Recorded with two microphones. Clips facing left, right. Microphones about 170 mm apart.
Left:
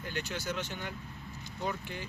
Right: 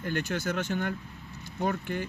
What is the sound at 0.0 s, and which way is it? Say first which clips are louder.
Speech: right 7 dB; 50° right (ahead or behind).